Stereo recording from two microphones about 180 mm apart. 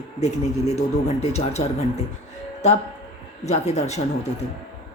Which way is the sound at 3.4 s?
40° left (ahead or behind).